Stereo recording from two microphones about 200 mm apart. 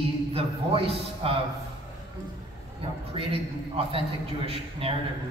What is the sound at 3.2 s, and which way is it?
Speech, 25° right (ahead or behind).